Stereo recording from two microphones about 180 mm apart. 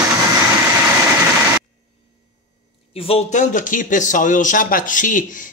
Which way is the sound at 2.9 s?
35° left (ahead or behind).